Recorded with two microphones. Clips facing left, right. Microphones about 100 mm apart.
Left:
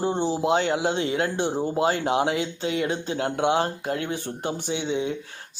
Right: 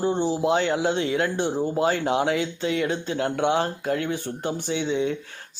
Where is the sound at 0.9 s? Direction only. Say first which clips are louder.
Right 1 dB; 35° left (ahead or behind).